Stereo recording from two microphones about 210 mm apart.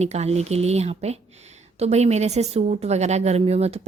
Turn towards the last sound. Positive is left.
turn(degrees=-30)  # may be behind; listen again after turning